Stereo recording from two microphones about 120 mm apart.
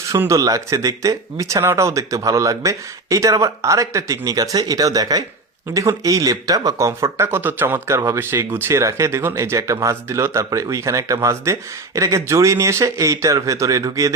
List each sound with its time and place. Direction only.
0.1 s speech: 25° right (ahead or behind)